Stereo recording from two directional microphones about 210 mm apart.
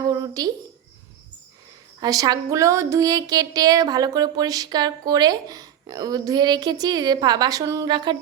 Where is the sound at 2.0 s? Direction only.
20° right (ahead or behind).